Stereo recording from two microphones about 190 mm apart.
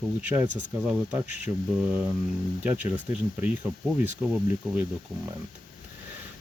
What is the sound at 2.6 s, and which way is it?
Speech, 5° right (ahead or behind).